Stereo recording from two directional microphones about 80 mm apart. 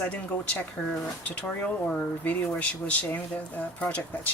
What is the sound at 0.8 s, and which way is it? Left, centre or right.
Speech, centre.